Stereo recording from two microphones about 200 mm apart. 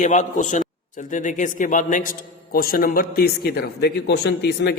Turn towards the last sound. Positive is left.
turn(degrees=55)  # may be behind; listen again after turning